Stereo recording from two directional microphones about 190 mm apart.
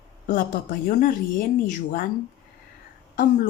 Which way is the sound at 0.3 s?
45° left (ahead or behind).